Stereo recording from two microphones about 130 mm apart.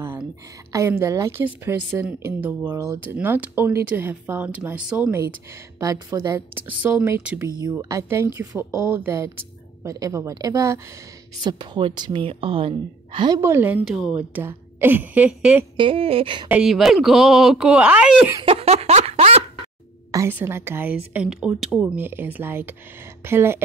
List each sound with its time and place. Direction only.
0.7 s a woman's voice: 25° right (ahead or behind)
5.8 s speech: 30° right (ahead or behind)
6.5 s a woman's voice: 15° right (ahead or behind)
11.4 s a woman's voice: 35° right (ahead or behind)
13.4 s a woman's voice: 15° right (ahead or behind)
13.8 s speech: 5° right (ahead or behind)
14.3 s a woman's voice: 15° right (ahead or behind)
15.7 s a woman's voice: 40° right (ahead or behind)
16.4 s speech: 5° right (ahead or behind)
18.4 s a sound: 50° right (ahead or behind)
20.1 s a woman's voice: 25° right (ahead or behind)